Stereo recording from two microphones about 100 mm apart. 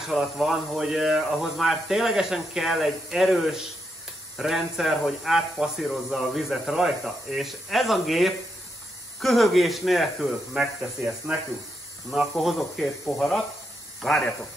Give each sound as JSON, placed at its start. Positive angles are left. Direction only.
{"t": 0.1, "sound": "speech", "side_deg": -5}
{"t": 12.1, "sound": "speech", "side_deg": 0}